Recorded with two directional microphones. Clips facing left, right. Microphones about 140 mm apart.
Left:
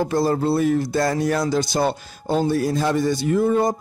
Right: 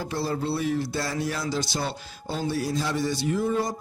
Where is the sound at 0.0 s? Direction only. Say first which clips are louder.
Left 8 dB; 45° left (ahead or behind).